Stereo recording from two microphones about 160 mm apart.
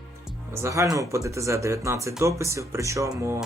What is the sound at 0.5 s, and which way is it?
Speech, 15° right (ahead or behind).